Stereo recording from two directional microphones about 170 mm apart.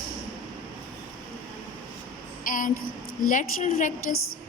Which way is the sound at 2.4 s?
50° left (ahead or behind).